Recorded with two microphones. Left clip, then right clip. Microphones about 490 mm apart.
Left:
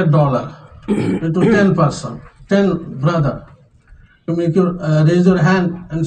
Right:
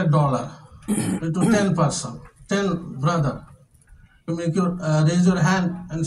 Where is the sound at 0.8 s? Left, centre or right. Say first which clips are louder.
Left 8 dB; right.